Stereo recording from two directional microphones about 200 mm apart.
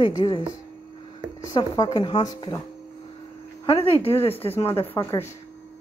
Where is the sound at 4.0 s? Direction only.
30° left (ahead or behind).